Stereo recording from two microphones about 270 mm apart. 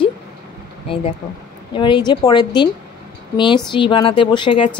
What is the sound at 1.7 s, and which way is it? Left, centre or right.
A woman's voice, centre.